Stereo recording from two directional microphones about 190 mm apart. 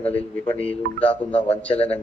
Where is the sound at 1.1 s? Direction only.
30° left (ahead or behind).